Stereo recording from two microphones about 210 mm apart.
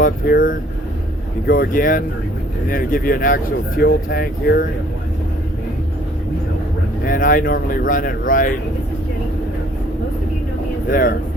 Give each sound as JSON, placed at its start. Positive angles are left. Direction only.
{"t": 0.0, "sound": "speech", "side_deg": 40}
{"t": 7.0, "sound": "speech", "side_deg": 40}
{"t": 10.8, "sound": "speech", "side_deg": 40}